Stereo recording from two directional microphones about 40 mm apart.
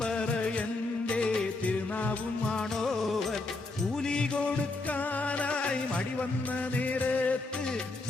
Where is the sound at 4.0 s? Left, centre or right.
Left.